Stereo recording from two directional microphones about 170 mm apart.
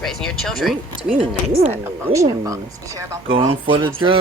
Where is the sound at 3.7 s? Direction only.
30° right (ahead or behind).